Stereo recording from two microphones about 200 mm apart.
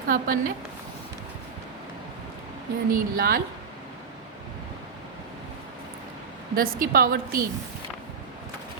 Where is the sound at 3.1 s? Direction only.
45° right (ahead or behind).